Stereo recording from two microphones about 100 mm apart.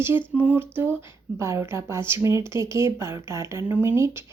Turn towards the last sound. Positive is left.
turn(degrees=-25)  # may be behind; listen again after turning